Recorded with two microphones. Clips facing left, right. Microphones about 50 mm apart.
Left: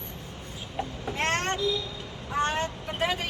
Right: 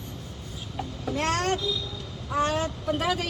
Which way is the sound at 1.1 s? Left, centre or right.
Left.